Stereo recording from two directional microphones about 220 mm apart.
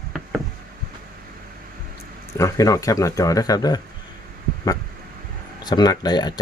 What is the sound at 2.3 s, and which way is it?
Speech, 15° left (ahead or behind).